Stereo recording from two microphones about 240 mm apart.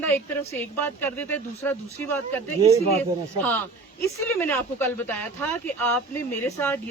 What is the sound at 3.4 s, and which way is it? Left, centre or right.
Speech, centre.